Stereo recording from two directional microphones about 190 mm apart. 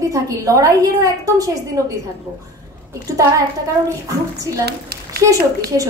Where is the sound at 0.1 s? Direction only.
20° right (ahead or behind).